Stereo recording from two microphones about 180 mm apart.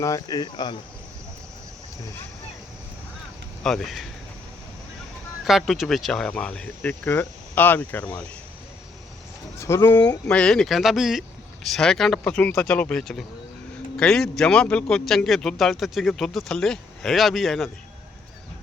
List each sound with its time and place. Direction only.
0.0 s cricket: 20° left (ahead or behind)
3.6 s a man's voice: centre (ahead or behind)
5.5 s speech: centre (ahead or behind)
9.6 s a man's voice: 15° left (ahead or behind)